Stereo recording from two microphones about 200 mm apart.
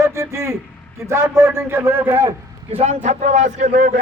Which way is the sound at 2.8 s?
35° right (ahead or behind).